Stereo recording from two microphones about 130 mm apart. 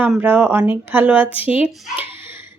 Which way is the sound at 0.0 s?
15° right (ahead or behind).